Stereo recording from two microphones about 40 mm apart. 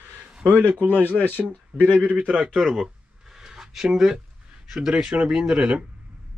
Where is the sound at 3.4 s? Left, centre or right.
Centre.